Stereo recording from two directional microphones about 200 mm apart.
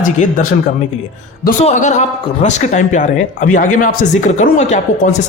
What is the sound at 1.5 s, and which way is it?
A man's voice, 35° left (ahead or behind).